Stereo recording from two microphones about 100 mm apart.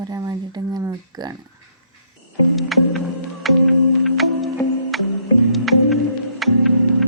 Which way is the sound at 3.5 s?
Centre (ahead or behind).